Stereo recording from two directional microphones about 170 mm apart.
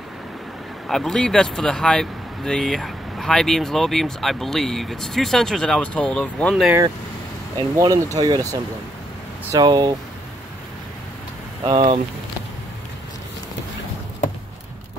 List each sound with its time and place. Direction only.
0.8 s speech: 5° left (ahead or behind)
7.5 s speech: 20° right (ahead or behind)
11.6 s speech: 30° right (ahead or behind)